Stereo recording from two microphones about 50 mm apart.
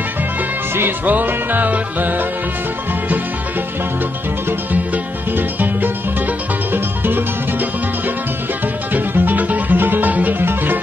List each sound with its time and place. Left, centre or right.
1.0 s music: right
4.9 s music: right
8.9 s music: right
10.4 s music: right